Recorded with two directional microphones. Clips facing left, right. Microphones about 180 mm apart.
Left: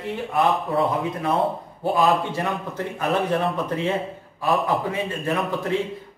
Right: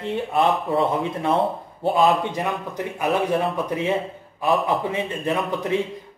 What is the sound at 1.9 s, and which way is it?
A man's voice, 15° right (ahead or behind).